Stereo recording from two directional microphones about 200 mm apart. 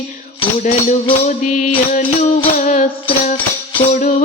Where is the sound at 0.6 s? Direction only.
40° left (ahead or behind).